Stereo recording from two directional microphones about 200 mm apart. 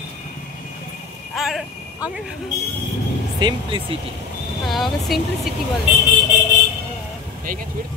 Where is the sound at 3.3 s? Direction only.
20° right (ahead or behind).